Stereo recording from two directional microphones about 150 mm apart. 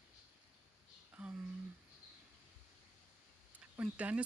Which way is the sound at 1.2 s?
10° right (ahead or behind).